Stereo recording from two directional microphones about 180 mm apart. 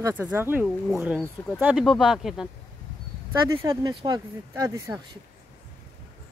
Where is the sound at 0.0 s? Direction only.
15° right (ahead or behind).